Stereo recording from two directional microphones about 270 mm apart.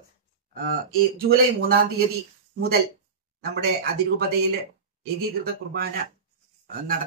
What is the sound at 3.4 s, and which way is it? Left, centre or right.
Speech, right.